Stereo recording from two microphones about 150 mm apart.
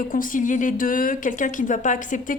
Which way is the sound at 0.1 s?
65° left (ahead or behind).